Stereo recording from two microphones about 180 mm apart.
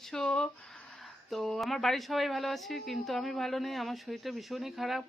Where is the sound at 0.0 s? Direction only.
5° left (ahead or behind).